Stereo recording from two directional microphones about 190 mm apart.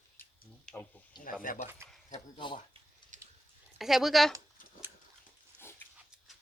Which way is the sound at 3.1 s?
40° right (ahead or behind).